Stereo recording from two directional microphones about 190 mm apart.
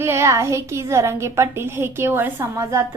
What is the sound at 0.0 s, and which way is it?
A woman's voice, 15° right (ahead or behind).